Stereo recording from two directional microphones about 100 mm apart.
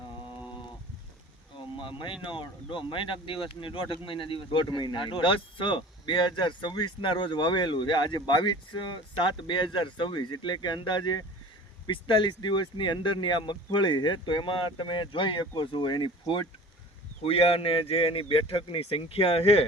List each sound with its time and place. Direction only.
1.5 s a sound: 55° left (ahead or behind)
2.2 s speech: 55° left (ahead or behind)
17.2 s speech: 80° left